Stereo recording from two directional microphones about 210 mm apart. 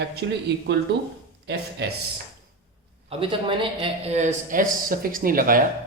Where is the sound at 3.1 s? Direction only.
25° right (ahead or behind); by 5.6 s 40° right (ahead or behind).